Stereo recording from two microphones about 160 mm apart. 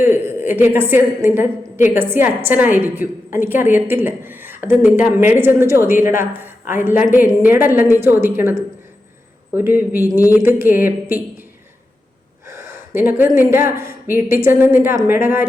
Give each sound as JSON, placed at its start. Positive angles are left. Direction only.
{"t": 0.0, "sound": "a woman's voice", "side_deg": -15}
{"t": 12.5, "sound": "a sound", "side_deg": -15}
{"t": 13.5, "sound": "a woman's voice", "side_deg": -15}